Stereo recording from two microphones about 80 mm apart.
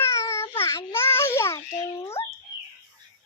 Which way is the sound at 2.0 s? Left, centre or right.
Left.